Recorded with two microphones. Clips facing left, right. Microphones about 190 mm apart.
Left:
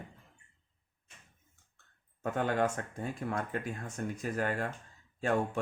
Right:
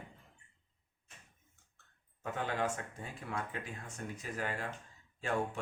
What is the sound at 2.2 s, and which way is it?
Speech, 50° left (ahead or behind).